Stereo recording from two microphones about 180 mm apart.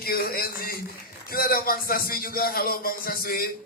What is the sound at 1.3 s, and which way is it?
A man's voice, 55° left (ahead or behind).